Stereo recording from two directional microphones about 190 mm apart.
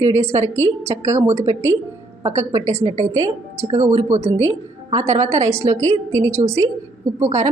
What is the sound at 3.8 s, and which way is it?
Speech, 40° right (ahead or behind).